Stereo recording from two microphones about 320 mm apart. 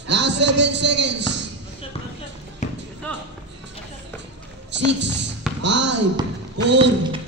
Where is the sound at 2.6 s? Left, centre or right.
Left.